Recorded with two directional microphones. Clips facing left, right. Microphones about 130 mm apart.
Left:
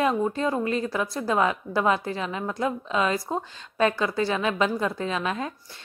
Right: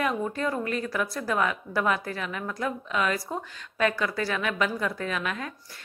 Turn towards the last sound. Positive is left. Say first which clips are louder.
# left 3 dB
turn(degrees=25)  # may be behind; listen again after turning